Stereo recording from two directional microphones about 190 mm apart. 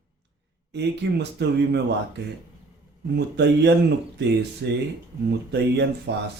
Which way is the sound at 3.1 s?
60° right (ahead or behind).